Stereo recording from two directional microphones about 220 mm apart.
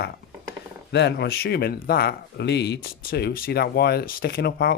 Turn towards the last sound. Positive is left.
turn(degrees=45)  # may be behind; listen again after turning